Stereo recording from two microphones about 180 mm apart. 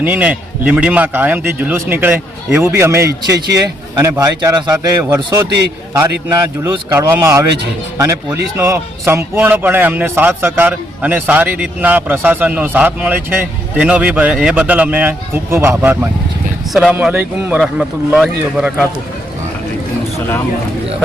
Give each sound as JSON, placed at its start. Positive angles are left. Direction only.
{"t": 0.0, "sound": "speech", "side_deg": -10}